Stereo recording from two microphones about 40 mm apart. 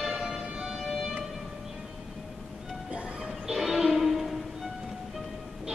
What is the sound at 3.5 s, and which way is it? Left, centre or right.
Music, centre.